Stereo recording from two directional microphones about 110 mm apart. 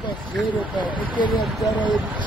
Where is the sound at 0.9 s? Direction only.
45° left (ahead or behind).